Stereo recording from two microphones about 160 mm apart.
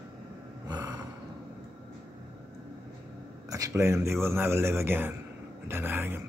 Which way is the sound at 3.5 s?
20° right (ahead or behind).